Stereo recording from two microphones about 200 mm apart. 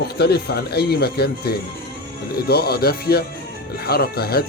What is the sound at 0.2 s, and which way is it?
Speech, 55° left (ahead or behind).